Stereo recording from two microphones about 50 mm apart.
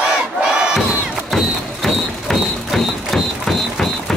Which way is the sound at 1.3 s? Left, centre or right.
Centre.